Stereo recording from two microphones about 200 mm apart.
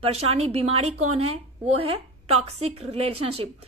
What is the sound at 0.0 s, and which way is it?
A woman's voice, 30° right (ahead or behind).